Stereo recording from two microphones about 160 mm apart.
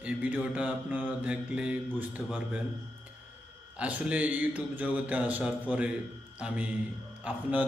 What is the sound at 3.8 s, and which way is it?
Speech, 10° right (ahead or behind).